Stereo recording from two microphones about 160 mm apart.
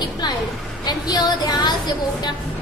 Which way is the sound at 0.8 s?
25° left (ahead or behind).